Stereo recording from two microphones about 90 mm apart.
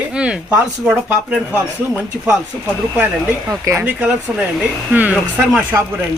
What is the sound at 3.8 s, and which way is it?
Speech, 15° right (ahead or behind).